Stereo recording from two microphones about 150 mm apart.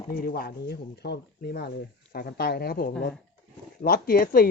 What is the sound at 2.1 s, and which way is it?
Speech, 75° left (ahead or behind).